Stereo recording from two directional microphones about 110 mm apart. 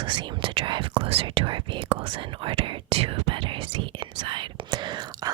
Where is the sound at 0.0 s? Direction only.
45° right (ahead or behind).